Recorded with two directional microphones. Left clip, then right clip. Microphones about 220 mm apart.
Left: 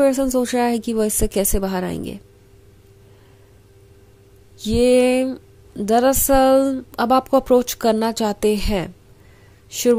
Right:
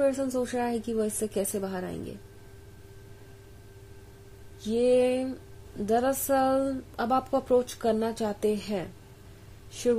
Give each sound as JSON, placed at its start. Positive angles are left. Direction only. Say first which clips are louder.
{"t": 0.0, "sound": "speech", "louder": "left 9 dB", "side_deg": 35}
{"t": 4.6, "sound": "speech", "louder": "left 8 dB", "side_deg": 35}